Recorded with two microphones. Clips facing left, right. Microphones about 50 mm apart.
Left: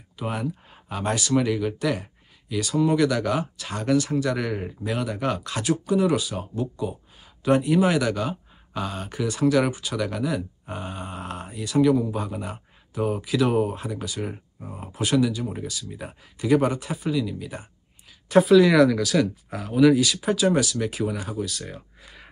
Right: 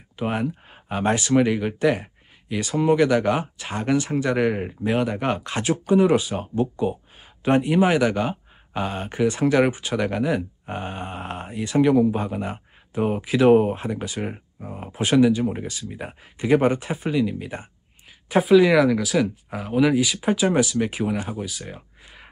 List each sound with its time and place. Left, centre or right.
0.1 s speech: right
18.3 s speech: centre